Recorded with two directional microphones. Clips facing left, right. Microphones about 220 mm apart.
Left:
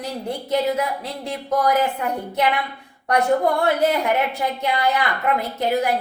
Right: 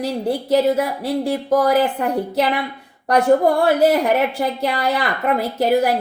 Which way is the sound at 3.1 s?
30° right (ahead or behind).